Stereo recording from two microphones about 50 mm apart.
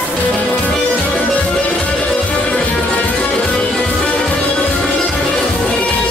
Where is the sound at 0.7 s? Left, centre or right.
Centre.